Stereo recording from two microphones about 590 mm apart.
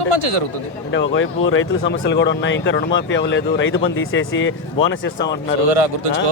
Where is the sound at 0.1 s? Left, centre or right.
Right.